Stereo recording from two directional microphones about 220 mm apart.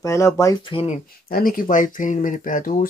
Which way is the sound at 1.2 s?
40° left (ahead or behind).